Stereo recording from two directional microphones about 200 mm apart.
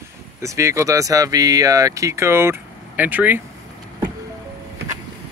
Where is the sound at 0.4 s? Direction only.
15° right (ahead or behind).